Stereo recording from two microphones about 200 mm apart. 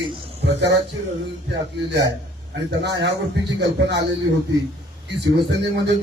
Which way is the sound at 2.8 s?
60° right (ahead or behind).